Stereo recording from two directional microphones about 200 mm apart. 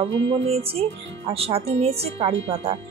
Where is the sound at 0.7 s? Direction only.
30° right (ahead or behind).